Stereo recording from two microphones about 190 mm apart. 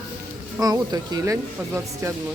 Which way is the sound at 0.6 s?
20° right (ahead or behind).